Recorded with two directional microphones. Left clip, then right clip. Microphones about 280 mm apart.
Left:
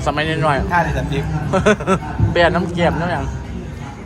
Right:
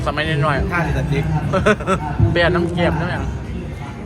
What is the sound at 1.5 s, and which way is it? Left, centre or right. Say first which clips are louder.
A man's voice: left 2 dB; centre.